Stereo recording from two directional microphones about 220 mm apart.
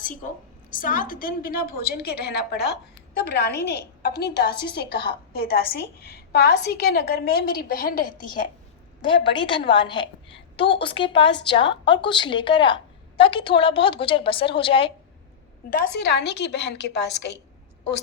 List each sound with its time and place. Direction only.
0.2 s a woman's voice: 35° left (ahead or behind)
4.4 s a woman's voice: 20° left (ahead or behind)
4.6 s a woman's voice: 45° left (ahead or behind)
9.0 s a woman's voice: 20° left (ahead or behind)
15.7 s a woman's voice: 45° left (ahead or behind)